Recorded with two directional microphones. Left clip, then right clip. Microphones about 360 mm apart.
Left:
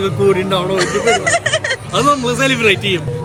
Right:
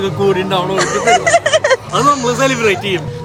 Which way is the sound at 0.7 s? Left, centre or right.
Centre.